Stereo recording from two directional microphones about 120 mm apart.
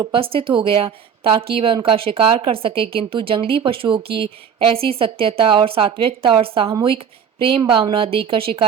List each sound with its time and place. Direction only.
0.1 s a woman's voice: 50° right (ahead or behind)